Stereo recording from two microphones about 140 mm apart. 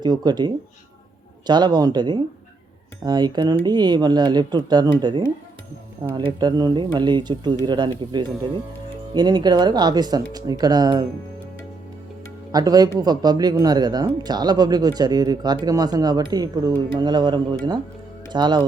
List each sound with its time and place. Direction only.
0.0 s speech: 30° right (ahead or behind)
12.5 s speech: 25° right (ahead or behind)